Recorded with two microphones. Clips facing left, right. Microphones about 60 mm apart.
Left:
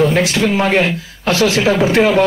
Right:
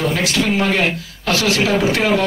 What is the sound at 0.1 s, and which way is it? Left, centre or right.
Speech, left.